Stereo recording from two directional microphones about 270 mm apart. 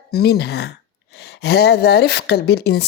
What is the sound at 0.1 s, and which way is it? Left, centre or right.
Speech, left.